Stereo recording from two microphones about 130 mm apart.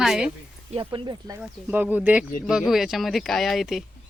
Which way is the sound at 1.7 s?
15° right (ahead or behind).